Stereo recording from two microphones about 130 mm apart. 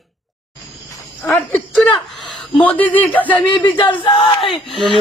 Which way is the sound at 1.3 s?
5° left (ahead or behind).